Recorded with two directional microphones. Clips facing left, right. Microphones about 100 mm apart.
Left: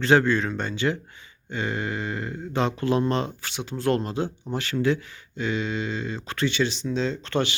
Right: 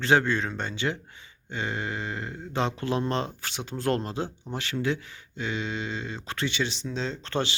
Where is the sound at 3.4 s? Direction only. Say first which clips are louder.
Left 2 dB; 40° right (ahead or behind).